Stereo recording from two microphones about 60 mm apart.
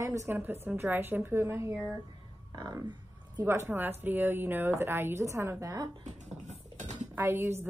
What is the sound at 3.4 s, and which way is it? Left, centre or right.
A woman's voice, right.